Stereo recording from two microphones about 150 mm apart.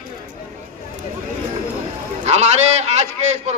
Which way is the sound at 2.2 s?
45° right (ahead or behind).